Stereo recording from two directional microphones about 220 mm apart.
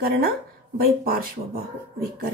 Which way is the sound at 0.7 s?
40° right (ahead or behind).